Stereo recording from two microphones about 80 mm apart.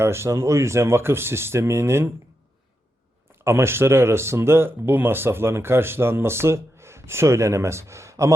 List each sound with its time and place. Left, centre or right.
0.0 s speech: right
3.4 s speech: right